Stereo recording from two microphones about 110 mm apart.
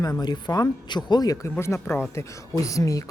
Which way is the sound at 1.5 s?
25° left (ahead or behind).